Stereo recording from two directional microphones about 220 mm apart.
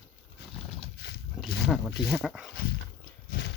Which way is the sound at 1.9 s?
50° left (ahead or behind).